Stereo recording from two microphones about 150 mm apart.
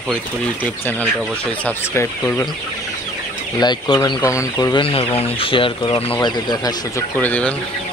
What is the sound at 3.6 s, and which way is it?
Speech, 25° left (ahead or behind).